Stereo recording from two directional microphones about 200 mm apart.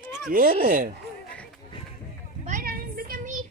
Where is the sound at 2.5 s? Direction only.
45° right (ahead or behind).